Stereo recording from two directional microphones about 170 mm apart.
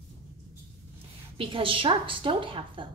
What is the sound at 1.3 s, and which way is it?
A woman's voice, 30° right (ahead or behind).